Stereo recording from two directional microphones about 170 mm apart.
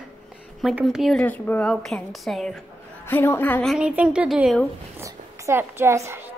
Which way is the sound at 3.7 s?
5° right (ahead or behind).